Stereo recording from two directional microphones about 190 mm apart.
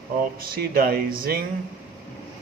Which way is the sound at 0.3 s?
50° right (ahead or behind).